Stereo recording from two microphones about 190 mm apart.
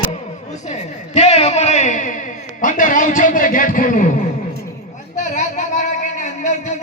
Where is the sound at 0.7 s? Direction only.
35° left (ahead or behind).